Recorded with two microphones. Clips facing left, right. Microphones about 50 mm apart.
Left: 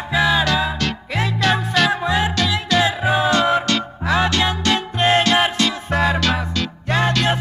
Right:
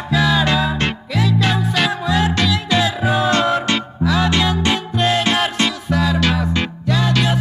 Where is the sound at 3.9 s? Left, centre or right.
Left.